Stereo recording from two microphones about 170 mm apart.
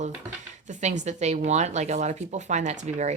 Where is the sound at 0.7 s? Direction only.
45° right (ahead or behind).